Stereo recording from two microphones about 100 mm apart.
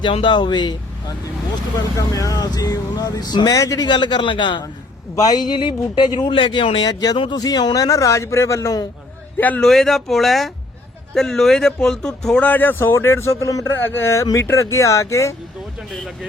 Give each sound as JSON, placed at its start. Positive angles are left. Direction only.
{"t": 0.0, "sound": "speech", "side_deg": 60}
{"t": 2.0, "sound": "a man's voice", "side_deg": 35}
{"t": 3.8, "sound": "speech", "side_deg": 45}
{"t": 5.1, "sound": "a man's voice", "side_deg": 40}
{"t": 9.6, "sound": "a man's voice", "side_deg": 5}